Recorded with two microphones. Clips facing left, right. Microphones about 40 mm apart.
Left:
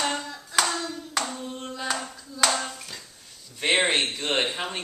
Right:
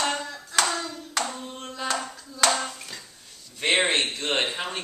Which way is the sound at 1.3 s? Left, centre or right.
Centre.